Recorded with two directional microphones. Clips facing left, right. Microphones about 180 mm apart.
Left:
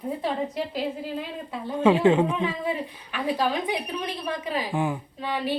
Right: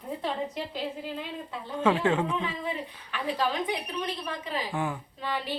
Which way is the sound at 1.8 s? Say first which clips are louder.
Left 6 dB; 15° left (ahead or behind).